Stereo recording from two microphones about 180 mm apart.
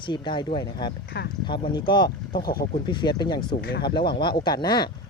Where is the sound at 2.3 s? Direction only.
55° left (ahead or behind).